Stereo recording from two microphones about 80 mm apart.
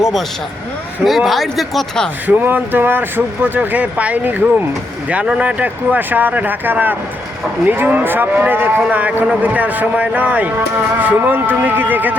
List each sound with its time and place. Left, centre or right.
1.0 s speech: centre
2.2 s speech: right